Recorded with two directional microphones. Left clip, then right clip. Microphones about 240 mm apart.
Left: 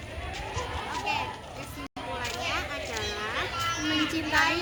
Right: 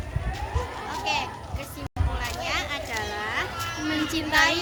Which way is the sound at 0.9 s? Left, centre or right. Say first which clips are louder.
Right 4 dB; right.